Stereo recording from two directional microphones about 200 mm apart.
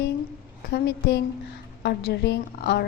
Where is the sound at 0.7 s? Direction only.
60° left (ahead or behind).